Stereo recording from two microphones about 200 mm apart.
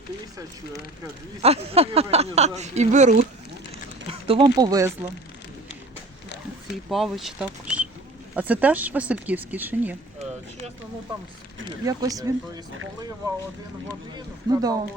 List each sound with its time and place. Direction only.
1.4 s speech: 30° right (ahead or behind)
6.9 s speech: centre (ahead or behind)
11.9 s speech: 15° right (ahead or behind)
14.2 s speech: 20° right (ahead or behind)